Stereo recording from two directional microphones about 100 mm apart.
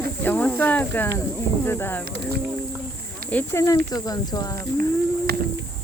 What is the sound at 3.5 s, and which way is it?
Speech, 30° left (ahead or behind).